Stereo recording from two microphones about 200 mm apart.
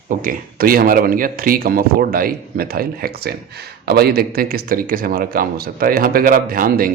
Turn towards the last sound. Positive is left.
turn(degrees=-45)  # may be behind; listen again after turning